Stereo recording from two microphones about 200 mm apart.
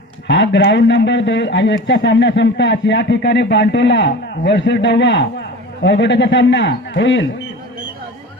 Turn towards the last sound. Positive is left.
turn(degrees=70)  # may be behind; listen again after turning